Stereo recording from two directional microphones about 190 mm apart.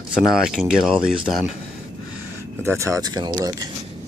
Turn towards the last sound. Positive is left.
turn(degrees=-20)  # may be behind; listen again after turning